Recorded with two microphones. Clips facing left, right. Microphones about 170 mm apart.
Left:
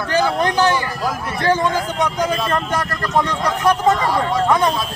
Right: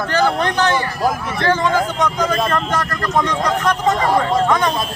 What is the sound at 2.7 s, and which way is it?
Speech, 10° left (ahead or behind).